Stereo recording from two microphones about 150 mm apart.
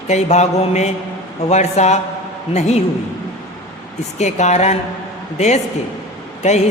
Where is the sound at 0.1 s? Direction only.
50° left (ahead or behind).